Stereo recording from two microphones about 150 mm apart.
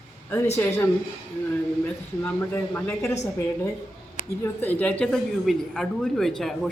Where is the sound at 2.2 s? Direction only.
10° left (ahead or behind).